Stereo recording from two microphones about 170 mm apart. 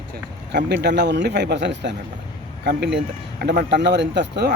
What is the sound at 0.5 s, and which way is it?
Speech, 90° right.